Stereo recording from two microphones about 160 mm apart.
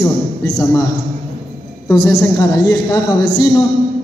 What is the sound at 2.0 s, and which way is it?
A woman's voice, 20° left (ahead or behind).